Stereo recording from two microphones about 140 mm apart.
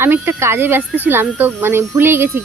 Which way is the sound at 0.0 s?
15° right (ahead or behind).